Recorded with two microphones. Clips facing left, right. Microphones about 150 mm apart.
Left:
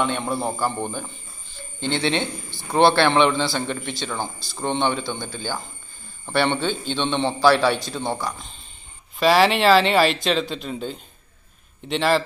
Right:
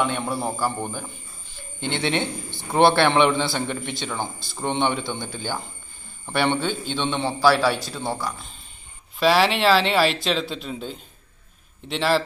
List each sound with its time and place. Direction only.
0.0 s a man's voice: 10° right (ahead or behind)
6.3 s a man's voice: 10° right (ahead or behind)